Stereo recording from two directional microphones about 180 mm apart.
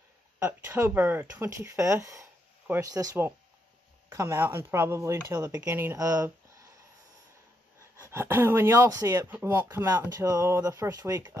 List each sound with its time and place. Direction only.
0.5 s speech: 10° right (ahead or behind)
8.0 s speech: 15° right (ahead or behind)